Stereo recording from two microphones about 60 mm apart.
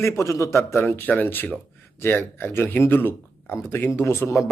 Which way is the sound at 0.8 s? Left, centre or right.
Left.